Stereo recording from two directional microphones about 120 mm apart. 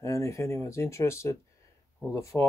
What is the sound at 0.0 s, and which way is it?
Speech, 25° left (ahead or behind).